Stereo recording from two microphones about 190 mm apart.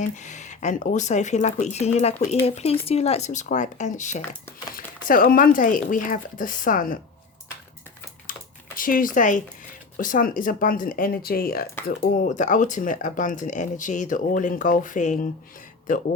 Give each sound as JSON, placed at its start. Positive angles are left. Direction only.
{"t": 0.2, "sound": "speech", "side_deg": 40}
{"t": 8.3, "sound": "typing", "side_deg": 45}
{"t": 10.0, "sound": "speech", "side_deg": 45}
{"t": 12.2, "sound": "speech", "side_deg": 40}